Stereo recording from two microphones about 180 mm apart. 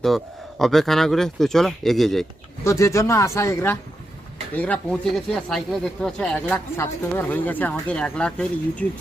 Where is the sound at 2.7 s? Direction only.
15° left (ahead or behind).